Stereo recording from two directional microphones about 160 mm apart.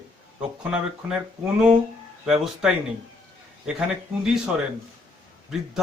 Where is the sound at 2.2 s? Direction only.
5° right (ahead or behind).